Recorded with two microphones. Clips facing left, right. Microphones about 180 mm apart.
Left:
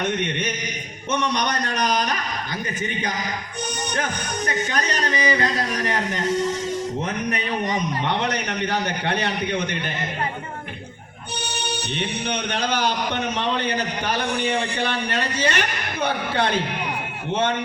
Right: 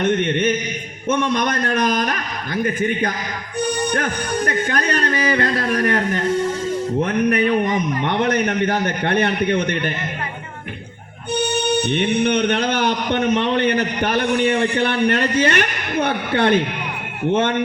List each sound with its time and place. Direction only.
0.0 s a man's voice: 55° right (ahead or behind)
11.3 s a man's voice: 55° right (ahead or behind)